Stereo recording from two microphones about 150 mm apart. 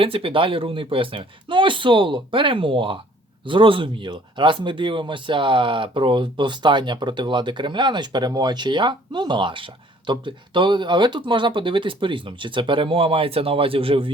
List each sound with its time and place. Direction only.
0.0 s speech: 35° right (ahead or behind)